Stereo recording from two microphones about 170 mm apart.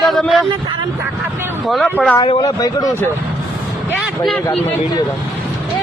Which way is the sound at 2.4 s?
20° left (ahead or behind).